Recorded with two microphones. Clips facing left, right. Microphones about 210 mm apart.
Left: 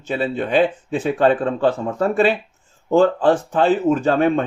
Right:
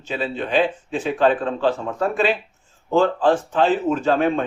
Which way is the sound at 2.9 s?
50° left (ahead or behind).